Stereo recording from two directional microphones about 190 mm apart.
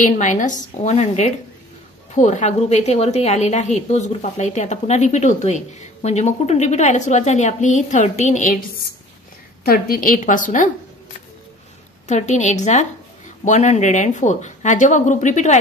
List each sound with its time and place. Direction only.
0.0 s a woman's voice: 40° left (ahead or behind)
12.1 s a woman's voice: 40° left (ahead or behind)